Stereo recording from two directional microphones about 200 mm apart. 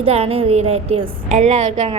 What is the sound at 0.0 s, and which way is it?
A woman's voice, 30° right (ahead or behind).